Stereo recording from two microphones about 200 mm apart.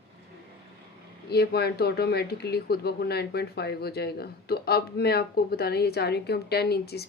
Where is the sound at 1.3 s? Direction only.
55° left (ahead or behind).